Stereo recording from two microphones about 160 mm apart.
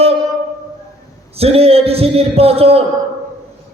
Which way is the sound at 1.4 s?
40° right (ahead or behind).